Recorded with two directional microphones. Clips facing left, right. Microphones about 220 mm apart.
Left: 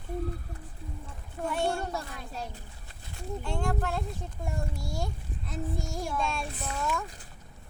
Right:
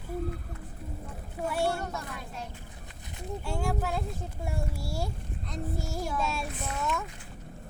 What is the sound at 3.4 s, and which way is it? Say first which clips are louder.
Speech: even; 5° right (ahead or behind).